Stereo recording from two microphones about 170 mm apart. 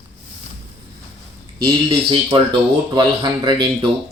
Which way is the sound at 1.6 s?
30° right (ahead or behind).